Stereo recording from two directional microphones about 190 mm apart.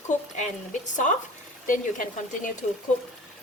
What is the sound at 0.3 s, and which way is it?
A woman's voice, 40° left (ahead or behind).